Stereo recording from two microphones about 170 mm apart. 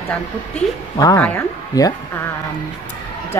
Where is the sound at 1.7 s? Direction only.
20° left (ahead or behind).